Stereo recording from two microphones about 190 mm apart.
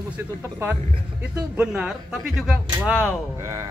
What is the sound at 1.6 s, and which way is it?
Speech, 5° right (ahead or behind).